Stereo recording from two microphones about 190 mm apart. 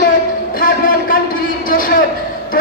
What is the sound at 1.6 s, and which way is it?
Speech, 45° left (ahead or behind).